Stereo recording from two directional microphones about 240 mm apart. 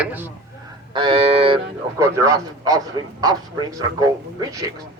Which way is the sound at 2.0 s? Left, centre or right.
Centre.